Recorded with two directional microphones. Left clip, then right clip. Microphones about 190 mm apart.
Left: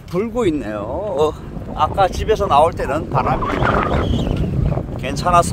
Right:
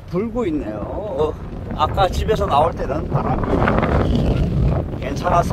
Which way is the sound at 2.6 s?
25° left (ahead or behind).